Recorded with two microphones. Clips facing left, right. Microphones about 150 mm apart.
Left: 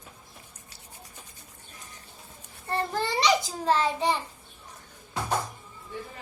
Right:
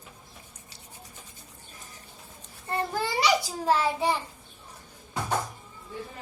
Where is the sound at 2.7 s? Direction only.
5° right (ahead or behind).